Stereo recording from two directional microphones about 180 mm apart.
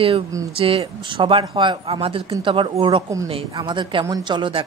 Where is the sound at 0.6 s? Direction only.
30° right (ahead or behind).